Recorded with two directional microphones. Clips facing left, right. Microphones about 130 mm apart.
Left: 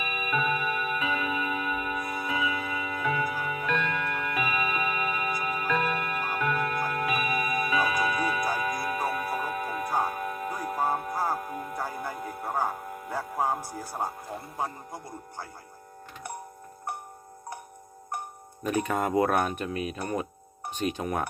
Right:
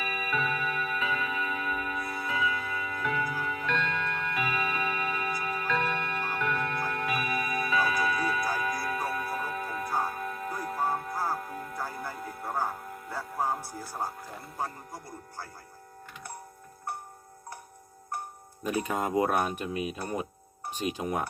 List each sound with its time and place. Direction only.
0.0 s music: 15° left (ahead or behind)
18.7 s speech: 15° right (ahead or behind)